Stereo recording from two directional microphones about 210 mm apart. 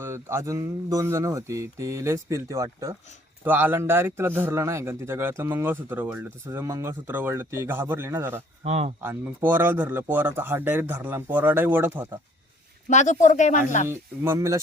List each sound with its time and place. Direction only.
0.0 s a man's voice: 10° right (ahead or behind)
8.6 s speech: 30° right (ahead or behind)
9.0 s a man's voice: 10° right (ahead or behind)
12.9 s speech: 35° left (ahead or behind)
13.8 s a man's voice: 10° right (ahead or behind)